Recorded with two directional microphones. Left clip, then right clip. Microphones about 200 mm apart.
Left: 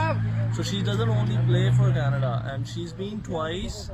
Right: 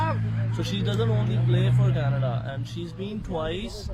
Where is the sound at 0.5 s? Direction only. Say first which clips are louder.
Even; 15° right (ahead or behind).